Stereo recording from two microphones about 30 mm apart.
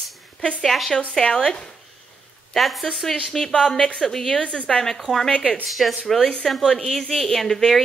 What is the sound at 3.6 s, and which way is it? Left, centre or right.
Speech, centre.